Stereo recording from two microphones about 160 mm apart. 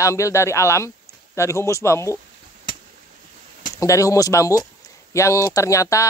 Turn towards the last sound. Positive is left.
turn(degrees=20)  # may be behind; listen again after turning